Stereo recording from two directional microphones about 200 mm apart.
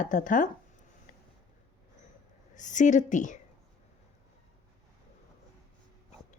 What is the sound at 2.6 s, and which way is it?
Speech, 40° left (ahead or behind).